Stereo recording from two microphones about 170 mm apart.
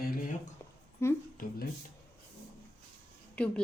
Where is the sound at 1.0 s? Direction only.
15° left (ahead or behind).